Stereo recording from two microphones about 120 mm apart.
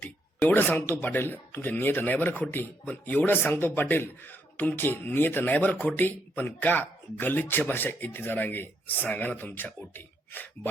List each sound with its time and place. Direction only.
0.4 s speech: 15° left (ahead or behind)